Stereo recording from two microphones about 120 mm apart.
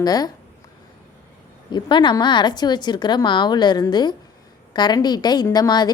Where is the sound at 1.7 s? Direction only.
40° left (ahead or behind).